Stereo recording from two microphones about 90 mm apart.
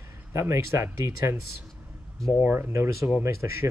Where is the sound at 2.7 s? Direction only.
30° right (ahead or behind).